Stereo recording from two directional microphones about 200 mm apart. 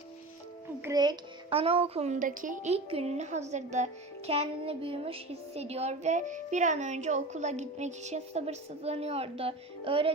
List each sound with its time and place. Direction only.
0.8 s child singing: 15° right (ahead or behind)